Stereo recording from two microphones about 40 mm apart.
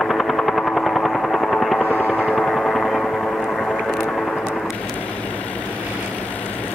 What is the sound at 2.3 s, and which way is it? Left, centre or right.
Vehicle, centre.